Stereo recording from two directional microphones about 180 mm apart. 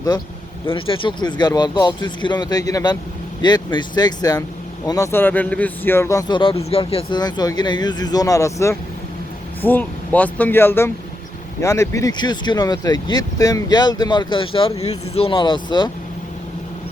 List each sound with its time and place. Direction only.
0.7 s speech: 30° left (ahead or behind)